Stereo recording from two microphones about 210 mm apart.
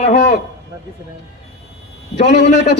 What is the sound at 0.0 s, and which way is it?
Speech, 45° left (ahead or behind).